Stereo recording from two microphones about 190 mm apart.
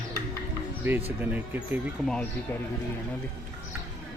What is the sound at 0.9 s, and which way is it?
Speech, 10° right (ahead or behind).